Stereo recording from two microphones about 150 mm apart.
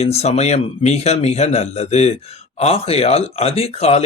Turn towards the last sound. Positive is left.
turn(degrees=40)  # may be behind; listen again after turning